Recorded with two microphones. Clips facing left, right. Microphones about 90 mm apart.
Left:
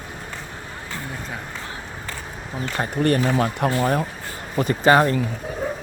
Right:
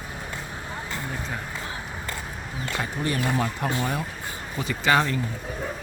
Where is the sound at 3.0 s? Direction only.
65° left (ahead or behind).